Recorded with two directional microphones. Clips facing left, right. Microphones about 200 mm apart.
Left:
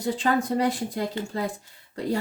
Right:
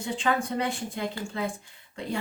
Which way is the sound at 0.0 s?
40° left (ahead or behind).